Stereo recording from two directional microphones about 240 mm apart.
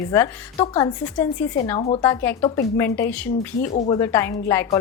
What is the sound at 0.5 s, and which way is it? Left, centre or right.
A woman's voice, left.